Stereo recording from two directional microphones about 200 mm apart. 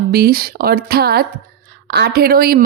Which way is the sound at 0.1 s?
50° right (ahead or behind).